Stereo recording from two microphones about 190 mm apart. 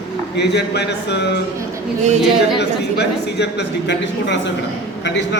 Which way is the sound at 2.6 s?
65° left (ahead or behind).